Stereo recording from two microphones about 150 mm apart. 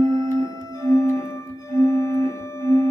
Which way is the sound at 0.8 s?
20° left (ahead or behind).